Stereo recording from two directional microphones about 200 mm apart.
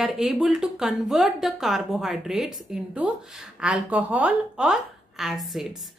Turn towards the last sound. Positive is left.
turn(degrees=0)  # may be behind; listen again after turning